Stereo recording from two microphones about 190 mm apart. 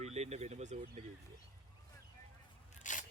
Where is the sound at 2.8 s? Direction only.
40° left (ahead or behind).